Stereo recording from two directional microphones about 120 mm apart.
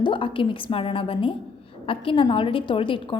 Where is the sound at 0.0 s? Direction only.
45° left (ahead or behind).